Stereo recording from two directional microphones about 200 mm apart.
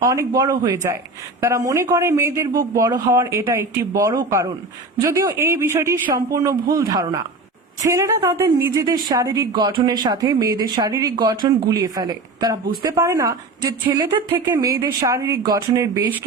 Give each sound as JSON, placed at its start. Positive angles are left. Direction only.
{"t": 0.0, "sound": "a man's voice", "side_deg": -15}